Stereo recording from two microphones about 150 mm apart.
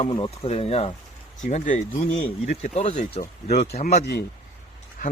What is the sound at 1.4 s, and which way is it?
Speech, 55° left (ahead or behind).